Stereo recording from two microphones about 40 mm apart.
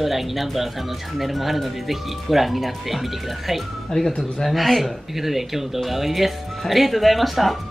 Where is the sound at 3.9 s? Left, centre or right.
Left.